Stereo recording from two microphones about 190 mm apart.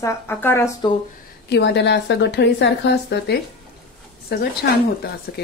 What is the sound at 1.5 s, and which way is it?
A woman's voice, 65° left (ahead or behind).